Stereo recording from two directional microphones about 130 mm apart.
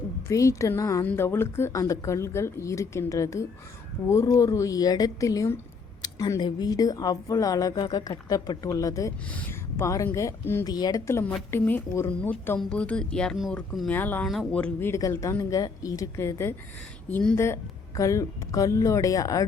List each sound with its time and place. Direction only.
0.3 s speech: 25° left (ahead or behind)
9.3 s speech: 15° left (ahead or behind)
10.7 s speech: 30° left (ahead or behind)